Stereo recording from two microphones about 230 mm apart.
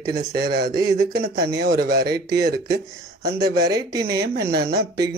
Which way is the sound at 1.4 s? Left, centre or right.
Right.